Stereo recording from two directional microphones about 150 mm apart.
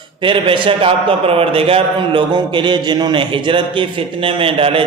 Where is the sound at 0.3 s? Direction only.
35° right (ahead or behind).